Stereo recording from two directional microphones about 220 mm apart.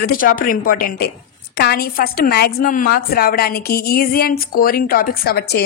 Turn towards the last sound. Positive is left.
turn(degrees=45)  # may be behind; listen again after turning